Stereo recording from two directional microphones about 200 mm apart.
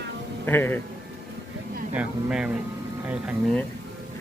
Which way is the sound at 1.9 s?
5° right (ahead or behind).